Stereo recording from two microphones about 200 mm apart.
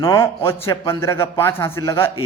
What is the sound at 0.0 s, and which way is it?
A man's voice, 15° left (ahead or behind).